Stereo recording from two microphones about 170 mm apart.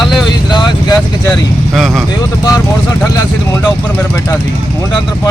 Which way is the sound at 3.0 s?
20° left (ahead or behind).